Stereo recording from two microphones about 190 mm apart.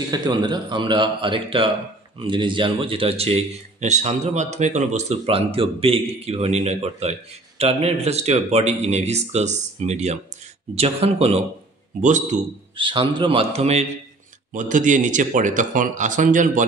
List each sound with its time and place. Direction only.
0.1 s a man's voice: 20° right (ahead or behind); by 12.4 s 40° right (ahead or behind)
12.7 s a man's voice: 25° right (ahead or behind); by 16.6 s 45° right (ahead or behind)